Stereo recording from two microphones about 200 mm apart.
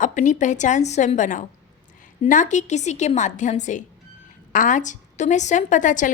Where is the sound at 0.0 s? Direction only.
40° left (ahead or behind).